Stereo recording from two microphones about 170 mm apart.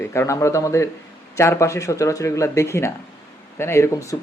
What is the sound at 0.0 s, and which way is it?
Speech, 15° left (ahead or behind).